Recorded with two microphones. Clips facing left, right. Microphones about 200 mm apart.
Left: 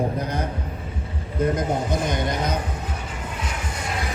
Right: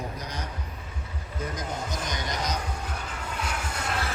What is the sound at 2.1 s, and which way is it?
Vehicle, 55° left (ahead or behind).